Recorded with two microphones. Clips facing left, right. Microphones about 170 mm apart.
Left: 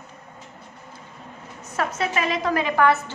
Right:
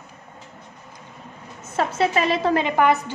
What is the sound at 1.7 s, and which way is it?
A woman's voice, 30° right (ahead or behind).